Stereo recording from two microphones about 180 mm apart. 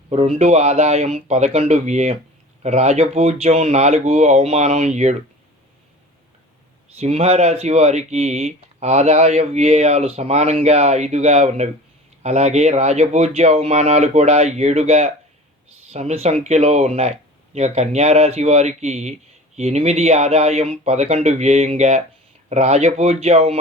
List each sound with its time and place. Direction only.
0.1 s speech: 35° right (ahead or behind)
7.0 s speech: 35° right (ahead or behind)